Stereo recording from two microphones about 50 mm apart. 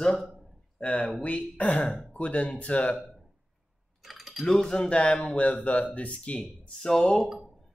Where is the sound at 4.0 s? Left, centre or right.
Centre.